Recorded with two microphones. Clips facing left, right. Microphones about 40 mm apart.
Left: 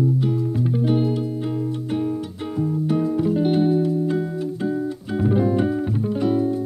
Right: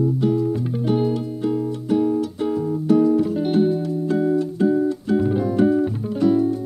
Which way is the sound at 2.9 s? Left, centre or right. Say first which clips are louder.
Right 6 dB; centre.